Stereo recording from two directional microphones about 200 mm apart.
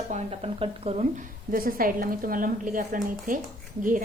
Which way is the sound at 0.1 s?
30° right (ahead or behind).